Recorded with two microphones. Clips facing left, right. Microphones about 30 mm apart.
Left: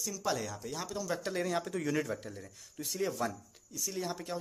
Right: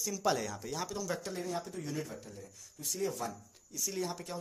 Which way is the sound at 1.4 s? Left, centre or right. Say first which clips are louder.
Left 5 dB; left.